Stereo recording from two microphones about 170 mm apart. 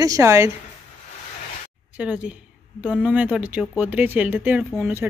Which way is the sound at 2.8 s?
5° right (ahead or behind).